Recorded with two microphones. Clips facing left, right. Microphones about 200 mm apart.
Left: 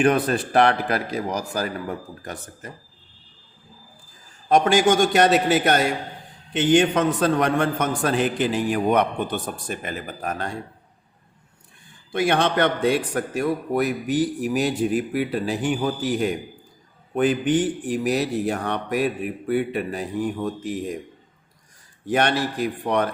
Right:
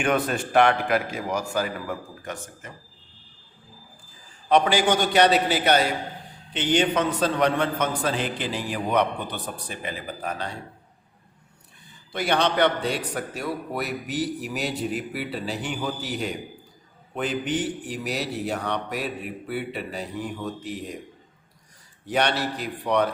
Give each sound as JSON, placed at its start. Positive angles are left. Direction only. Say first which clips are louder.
{"t": 0.0, "sound": "a man's voice", "louder": "left 4 dB", "side_deg": 35}
{"t": 4.4, "sound": "a man's voice", "louder": "left 3 dB", "side_deg": 45}
{"t": 12.3, "sound": "a man's voice", "louder": "even", "side_deg": 50}
{"t": 22.0, "sound": "a man's voice", "louder": "left 3 dB", "side_deg": 50}